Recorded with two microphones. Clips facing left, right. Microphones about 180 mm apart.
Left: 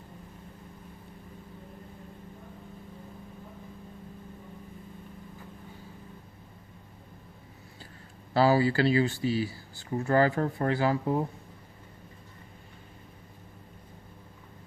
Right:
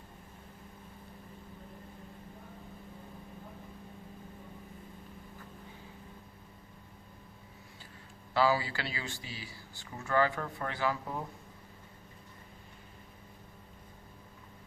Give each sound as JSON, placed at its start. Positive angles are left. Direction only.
{"t": 8.3, "sound": "speech", "side_deg": 40}